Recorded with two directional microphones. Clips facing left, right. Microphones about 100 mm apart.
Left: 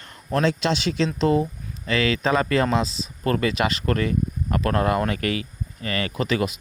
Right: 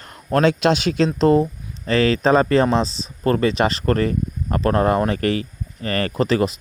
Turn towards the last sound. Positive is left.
turn(degrees=-35)  # may be behind; listen again after turning